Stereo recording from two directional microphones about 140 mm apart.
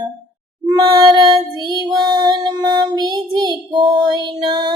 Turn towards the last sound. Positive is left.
turn(degrees=-30)  # may be behind; listen again after turning